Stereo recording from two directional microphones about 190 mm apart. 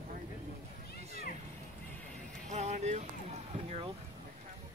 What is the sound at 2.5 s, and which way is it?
Music, 35° right (ahead or behind).